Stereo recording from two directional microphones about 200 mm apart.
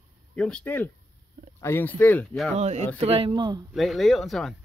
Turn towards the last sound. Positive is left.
turn(degrees=0)  # may be behind; listen again after turning